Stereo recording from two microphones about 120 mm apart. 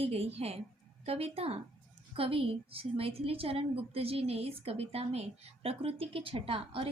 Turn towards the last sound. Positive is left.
turn(degrees=-50)  # may be behind; listen again after turning